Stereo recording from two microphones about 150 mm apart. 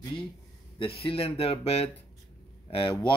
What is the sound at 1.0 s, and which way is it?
Speech, 40° left (ahead or behind).